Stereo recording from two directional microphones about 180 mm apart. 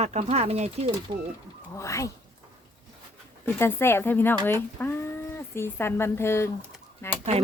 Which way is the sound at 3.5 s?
15° left (ahead or behind).